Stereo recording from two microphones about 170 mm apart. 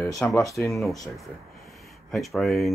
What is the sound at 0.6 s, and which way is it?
Speech, 5° left (ahead or behind).